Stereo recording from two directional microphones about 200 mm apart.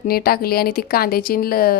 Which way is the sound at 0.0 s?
50° left (ahead or behind).